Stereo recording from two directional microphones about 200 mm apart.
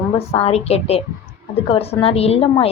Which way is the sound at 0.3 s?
30° left (ahead or behind).